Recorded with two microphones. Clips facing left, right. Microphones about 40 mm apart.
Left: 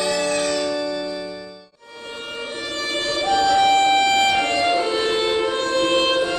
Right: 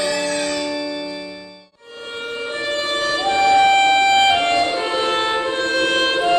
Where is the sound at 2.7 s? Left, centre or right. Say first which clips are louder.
Right 4 dB; right.